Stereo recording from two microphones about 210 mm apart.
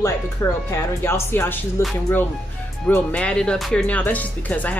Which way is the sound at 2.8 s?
5° left (ahead or behind).